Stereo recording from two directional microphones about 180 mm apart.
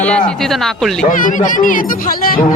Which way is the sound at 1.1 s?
50° left (ahead or behind).